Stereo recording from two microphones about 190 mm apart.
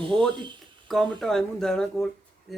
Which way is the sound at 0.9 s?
Centre (ahead or behind).